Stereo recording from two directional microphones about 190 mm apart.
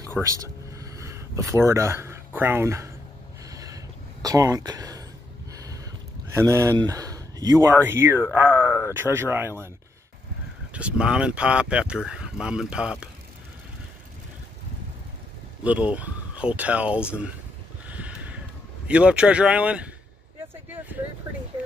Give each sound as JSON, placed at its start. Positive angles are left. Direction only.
{"t": 0.2, "sound": "speech", "side_deg": -20}
{"t": 3.4, "sound": "a sound", "side_deg": -20}
{"t": 6.3, "sound": "speech", "side_deg": -15}
{"t": 10.7, "sound": "speech", "side_deg": -5}
{"t": 15.6, "sound": "speech", "side_deg": -5}
{"t": 17.8, "sound": "a sound", "side_deg": -5}
{"t": 18.9, "sound": "speech", "side_deg": -5}